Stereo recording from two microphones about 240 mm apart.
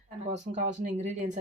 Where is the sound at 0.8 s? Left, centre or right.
Right.